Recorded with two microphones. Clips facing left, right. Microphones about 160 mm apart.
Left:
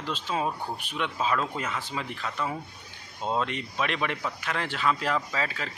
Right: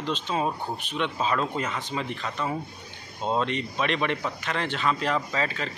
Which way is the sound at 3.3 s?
5° left (ahead or behind).